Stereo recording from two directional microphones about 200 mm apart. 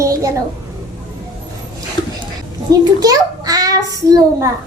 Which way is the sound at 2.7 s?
20° right (ahead or behind).